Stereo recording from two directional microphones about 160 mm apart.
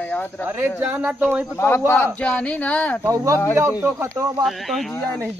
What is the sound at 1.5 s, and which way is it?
Speech, 15° left (ahead or behind).